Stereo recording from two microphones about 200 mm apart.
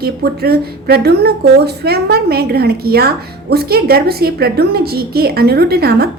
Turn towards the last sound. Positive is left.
turn(degrees=-50)  # may be behind; listen again after turning